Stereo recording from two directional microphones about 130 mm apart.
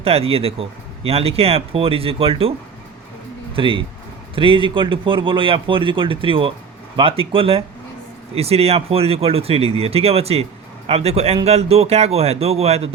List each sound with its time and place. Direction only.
0.0 s speech: 50° right (ahead or behind)
3.5 s a man's voice: 40° right (ahead or behind)